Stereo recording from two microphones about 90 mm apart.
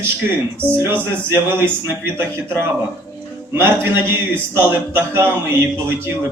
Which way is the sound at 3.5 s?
25° right (ahead or behind).